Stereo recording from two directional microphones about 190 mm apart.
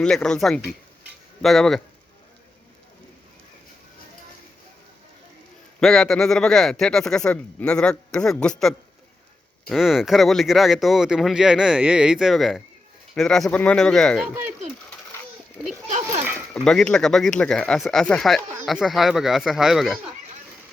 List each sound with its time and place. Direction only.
0.0 s speech: 5° left (ahead or behind)
5.8 s speech: centre (ahead or behind)
15.9 s a sound: 35° right (ahead or behind)
16.6 s speech: 5° left (ahead or behind)